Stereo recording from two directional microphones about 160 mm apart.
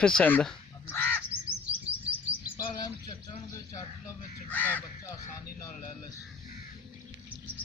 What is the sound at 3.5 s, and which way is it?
A man's voice, 20° left (ahead or behind).